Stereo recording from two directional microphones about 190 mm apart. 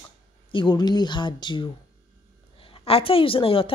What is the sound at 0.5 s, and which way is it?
Speech, 25° left (ahead or behind).